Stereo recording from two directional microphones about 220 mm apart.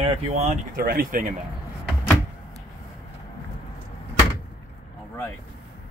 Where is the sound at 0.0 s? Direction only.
25° right (ahead or behind).